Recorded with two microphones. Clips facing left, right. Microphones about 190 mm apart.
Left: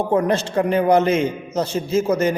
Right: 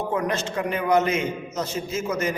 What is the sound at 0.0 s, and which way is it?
A man's voice, 30° left (ahead or behind).